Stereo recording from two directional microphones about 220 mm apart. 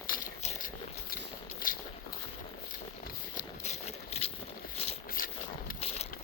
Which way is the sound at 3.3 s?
30° left (ahead or behind).